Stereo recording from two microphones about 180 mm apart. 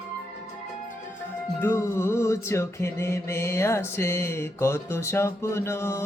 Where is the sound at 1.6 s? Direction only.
15° left (ahead or behind).